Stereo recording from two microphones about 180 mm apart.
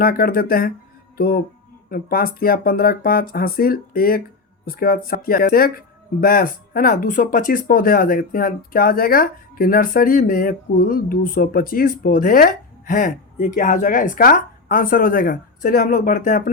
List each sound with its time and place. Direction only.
0.0 s speech: 55° left (ahead or behind)